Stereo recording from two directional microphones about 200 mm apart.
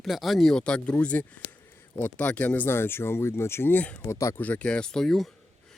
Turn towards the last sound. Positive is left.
turn(degrees=0)  # may be behind; listen again after turning